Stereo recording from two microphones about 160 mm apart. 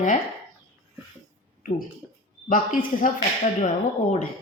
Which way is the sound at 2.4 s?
60° left (ahead or behind).